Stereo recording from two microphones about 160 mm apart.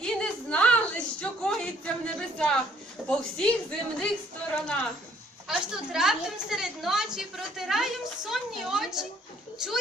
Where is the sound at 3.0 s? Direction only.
5° right (ahead or behind).